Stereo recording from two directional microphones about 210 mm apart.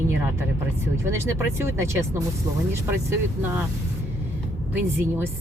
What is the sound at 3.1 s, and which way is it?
Speech, 10° right (ahead or behind).